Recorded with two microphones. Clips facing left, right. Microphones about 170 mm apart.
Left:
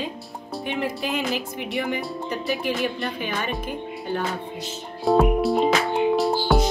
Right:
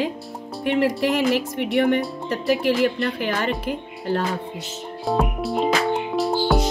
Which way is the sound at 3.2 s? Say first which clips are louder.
Right 4 dB; 75° right (ahead or behind).